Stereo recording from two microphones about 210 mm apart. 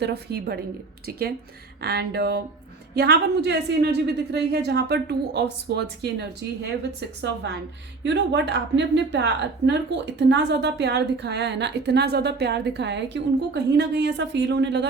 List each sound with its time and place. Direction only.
0.0 s a woman's voice: 50° right (ahead or behind)
1.8 s a woman's voice: 50° right (ahead or behind)
8.0 s a woman's voice: 55° right (ahead or behind)